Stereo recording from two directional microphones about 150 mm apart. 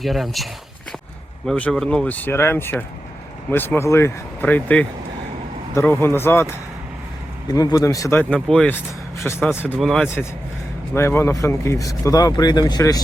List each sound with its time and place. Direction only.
0.0 s speech: centre (ahead or behind)
1.5 s speech: 5° left (ahead or behind)
9.7 s speech: centre (ahead or behind)
10.9 s speech: 15° left (ahead or behind)